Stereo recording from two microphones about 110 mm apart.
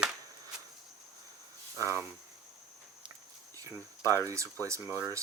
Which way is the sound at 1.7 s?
25° right (ahead or behind).